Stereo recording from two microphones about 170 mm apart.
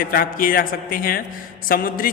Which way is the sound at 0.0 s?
55° left (ahead or behind).